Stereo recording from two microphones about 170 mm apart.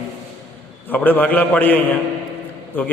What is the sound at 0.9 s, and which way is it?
Speech, 10° left (ahead or behind).